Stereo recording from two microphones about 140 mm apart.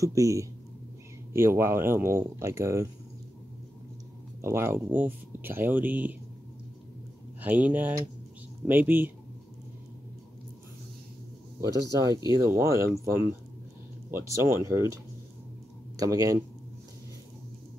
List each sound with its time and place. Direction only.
0.0 s speech: 25° right (ahead or behind)
4.4 s speech: 20° right (ahead or behind)
7.4 s speech: 10° right (ahead or behind)
11.6 s speech: 25° right (ahead or behind)
16.0 s speech: 25° right (ahead or behind)